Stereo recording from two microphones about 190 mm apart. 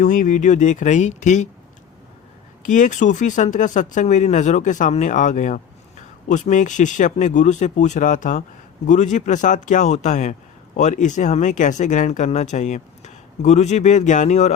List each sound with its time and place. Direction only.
0.0 s speech: 40° left (ahead or behind)
2.6 s speech: 40° left (ahead or behind)